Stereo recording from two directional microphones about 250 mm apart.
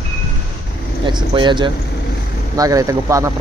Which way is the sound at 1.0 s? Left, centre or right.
Centre.